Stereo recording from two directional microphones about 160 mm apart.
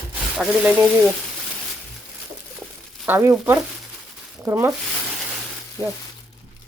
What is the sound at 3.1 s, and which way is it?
Speech, 15° right (ahead or behind).